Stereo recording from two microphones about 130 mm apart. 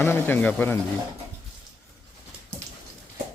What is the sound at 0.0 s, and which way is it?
Speech, 15° left (ahead or behind).